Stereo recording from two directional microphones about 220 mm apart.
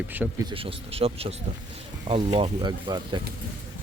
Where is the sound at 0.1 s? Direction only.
10° right (ahead or behind).